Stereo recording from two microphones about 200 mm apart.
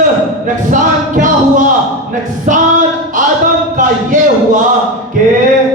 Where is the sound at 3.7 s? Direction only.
40° right (ahead or behind).